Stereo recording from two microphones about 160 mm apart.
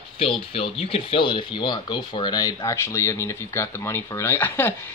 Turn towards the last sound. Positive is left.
turn(degrees=15)  # may be behind; listen again after turning